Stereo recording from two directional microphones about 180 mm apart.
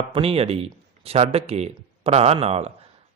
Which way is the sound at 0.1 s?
30° right (ahead or behind).